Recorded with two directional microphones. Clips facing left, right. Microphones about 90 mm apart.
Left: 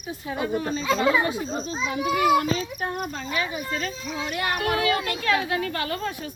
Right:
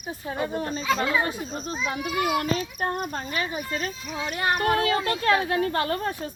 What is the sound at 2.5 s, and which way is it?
Speech, 50° right (ahead or behind).